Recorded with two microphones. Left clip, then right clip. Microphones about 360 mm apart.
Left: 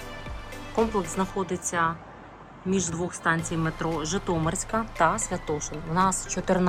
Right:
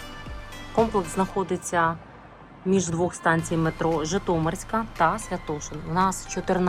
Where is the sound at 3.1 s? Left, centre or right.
Centre.